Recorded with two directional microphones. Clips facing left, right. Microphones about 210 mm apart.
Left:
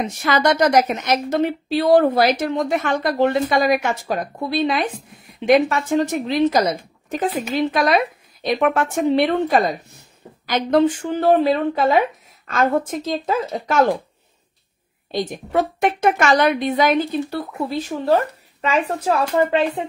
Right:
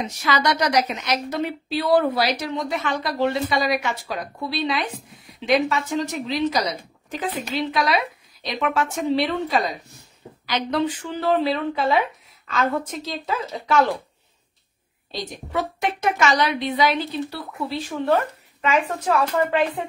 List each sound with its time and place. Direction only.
0.0 s a woman's voice: 50° left (ahead or behind)
15.0 s a woman's voice: 55° left (ahead or behind)
17.8 s speech: 40° left (ahead or behind)